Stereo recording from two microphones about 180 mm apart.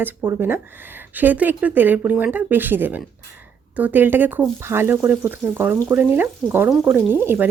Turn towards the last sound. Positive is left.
turn(degrees=-10)  # may be behind; listen again after turning